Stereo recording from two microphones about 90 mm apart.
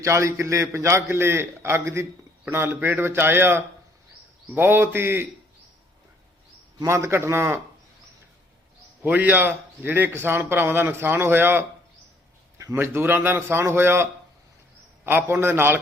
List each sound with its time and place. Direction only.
0.0 s a man's voice: 30° right (ahead or behind)
6.8 s a man's voice: 30° right (ahead or behind)
9.0 s a man's voice: 20° right (ahead or behind)
12.7 s a man's voice: 25° right (ahead or behind)